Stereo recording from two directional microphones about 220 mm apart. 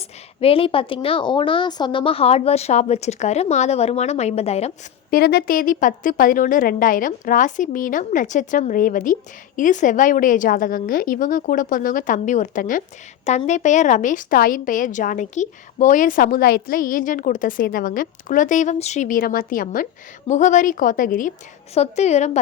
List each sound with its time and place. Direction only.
0.3 s a woman's voice: 25° left (ahead or behind)
5.1 s a woman's voice: 45° left (ahead or behind)